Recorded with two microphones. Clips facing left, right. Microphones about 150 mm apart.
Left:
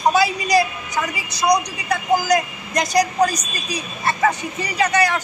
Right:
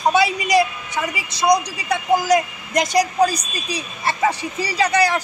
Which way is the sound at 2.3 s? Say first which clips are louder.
Right 1 dB; 25° right (ahead or behind).